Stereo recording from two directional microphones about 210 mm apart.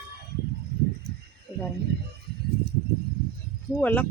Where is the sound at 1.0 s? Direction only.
50° right (ahead or behind).